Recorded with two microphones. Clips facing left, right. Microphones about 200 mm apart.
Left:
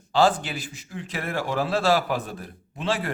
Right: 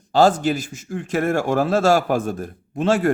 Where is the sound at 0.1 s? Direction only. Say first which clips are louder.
Right 5 dB; 45° right (ahead or behind).